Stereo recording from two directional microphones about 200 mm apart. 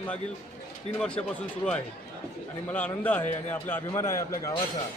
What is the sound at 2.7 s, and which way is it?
A man's voice, 10° left (ahead or behind).